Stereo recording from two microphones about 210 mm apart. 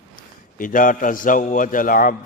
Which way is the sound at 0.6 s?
40° left (ahead or behind).